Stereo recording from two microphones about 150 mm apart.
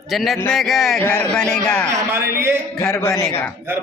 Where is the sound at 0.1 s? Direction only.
Centre (ahead or behind).